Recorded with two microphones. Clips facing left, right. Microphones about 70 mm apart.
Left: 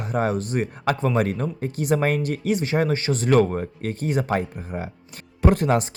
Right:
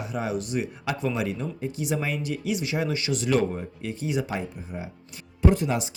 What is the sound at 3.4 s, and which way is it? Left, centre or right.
Speech, left.